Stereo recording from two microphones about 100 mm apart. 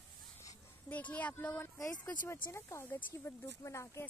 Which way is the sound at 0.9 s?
15° left (ahead or behind).